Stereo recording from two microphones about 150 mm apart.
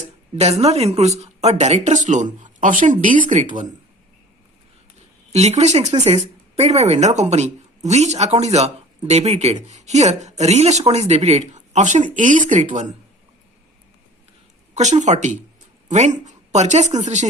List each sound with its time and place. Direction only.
0.3 s a woman's voice: 45° right (ahead or behind)
5.3 s a woman's voice: 45° right (ahead or behind)
14.8 s a woman's voice: 50° right (ahead or behind)